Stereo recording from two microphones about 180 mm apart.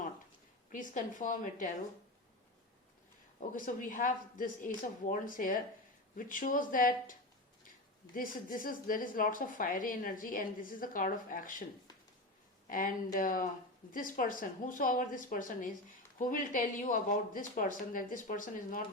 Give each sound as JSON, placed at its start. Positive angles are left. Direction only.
{"t": 0.7, "sound": "speech", "side_deg": 45}
{"t": 3.5, "sound": "speech", "side_deg": 45}
{"t": 12.6, "sound": "speech", "side_deg": 50}